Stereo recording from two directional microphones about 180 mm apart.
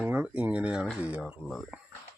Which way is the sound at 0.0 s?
10° right (ahead or behind).